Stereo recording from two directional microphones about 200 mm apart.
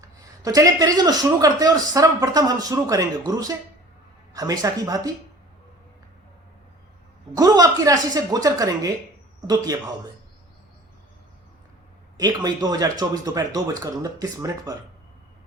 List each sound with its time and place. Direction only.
0.4 s speech: 20° right (ahead or behind)
7.3 s speech: 20° right (ahead or behind)
12.1 s speech: 20° right (ahead or behind)